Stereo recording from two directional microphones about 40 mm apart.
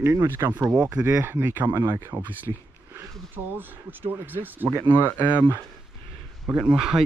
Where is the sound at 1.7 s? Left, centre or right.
Right.